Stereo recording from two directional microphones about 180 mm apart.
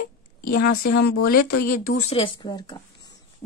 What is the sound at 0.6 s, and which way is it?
Speech, 55° left (ahead or behind).